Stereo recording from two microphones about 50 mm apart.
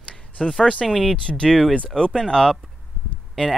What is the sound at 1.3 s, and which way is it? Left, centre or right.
Speech, centre.